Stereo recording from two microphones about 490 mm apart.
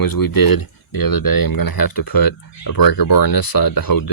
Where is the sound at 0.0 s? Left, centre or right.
Left.